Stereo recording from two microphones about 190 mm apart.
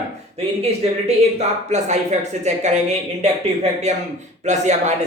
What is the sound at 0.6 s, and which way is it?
Speech, 35° right (ahead or behind).